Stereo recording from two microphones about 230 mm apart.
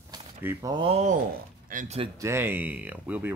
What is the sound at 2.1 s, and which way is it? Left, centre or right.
Speech, centre.